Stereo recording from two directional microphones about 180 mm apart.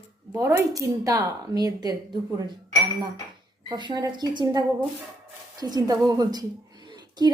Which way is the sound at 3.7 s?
25° right (ahead or behind).